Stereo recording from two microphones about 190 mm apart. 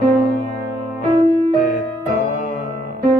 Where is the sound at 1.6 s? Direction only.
45° left (ahead or behind).